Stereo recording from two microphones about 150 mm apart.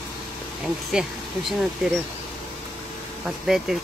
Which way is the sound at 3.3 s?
Centre (ahead or behind).